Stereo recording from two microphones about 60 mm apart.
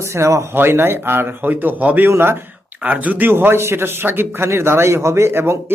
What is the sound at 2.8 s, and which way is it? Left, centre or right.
Speech, right.